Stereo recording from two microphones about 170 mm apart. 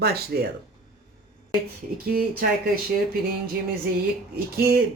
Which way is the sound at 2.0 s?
60° right (ahead or behind).